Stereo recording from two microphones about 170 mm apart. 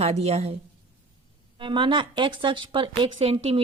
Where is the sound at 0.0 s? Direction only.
40° right (ahead or behind).